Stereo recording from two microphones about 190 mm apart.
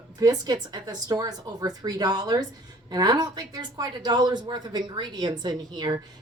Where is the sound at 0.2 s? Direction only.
20° right (ahead or behind).